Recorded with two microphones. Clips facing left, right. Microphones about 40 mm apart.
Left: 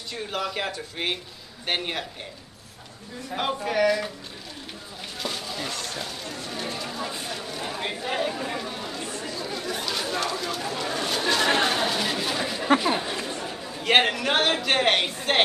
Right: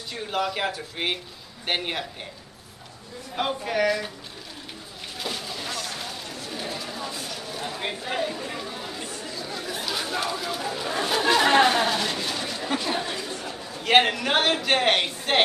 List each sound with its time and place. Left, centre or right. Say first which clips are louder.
0.1 s speech: right 2 dB; centre
3.3 s speech: left 1 dB; centre
5.2 s a sound: left 1 dB; centre
7.0 s a sound: left 2 dB; centre
7.5 s chatter: right 1 dB; centre
9.0 s chatter: left 2 dB; centre
9.3 s chatter: left 1 dB; centre
11.6 s a sound: right 3 dB; centre
12.0 s a sound: left 2 dB; centre
12.7 s speech: left 5 dB; centre
13.1 s chatter: left 1 dB; left
13.5 s a man's voice: right 1 dB; centre